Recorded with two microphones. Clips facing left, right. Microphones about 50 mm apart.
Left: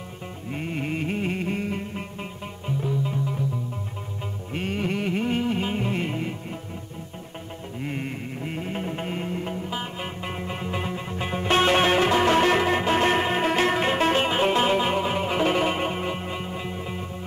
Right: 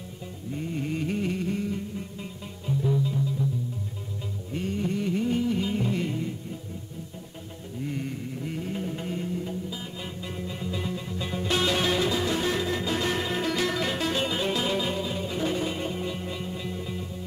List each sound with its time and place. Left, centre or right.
0.5 s music: left
4.5 s music: left
7.8 s music: left